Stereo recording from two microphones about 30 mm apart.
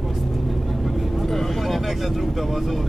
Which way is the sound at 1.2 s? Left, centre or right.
Centre.